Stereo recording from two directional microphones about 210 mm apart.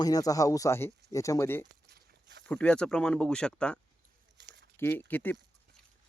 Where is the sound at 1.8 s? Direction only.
50° right (ahead or behind).